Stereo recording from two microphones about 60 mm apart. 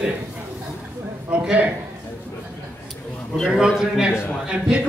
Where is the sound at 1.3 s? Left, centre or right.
Right.